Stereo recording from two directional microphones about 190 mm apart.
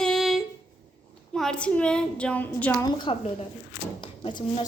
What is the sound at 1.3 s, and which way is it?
A woman's voice, 5° left (ahead or behind).